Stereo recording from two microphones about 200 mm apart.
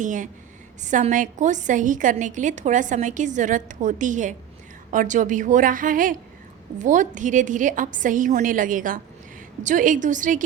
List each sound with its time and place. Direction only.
0.0 s a woman's voice: 40° right (ahead or behind)